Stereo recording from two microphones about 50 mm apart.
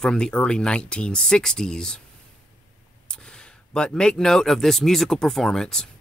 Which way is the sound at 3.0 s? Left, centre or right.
Centre.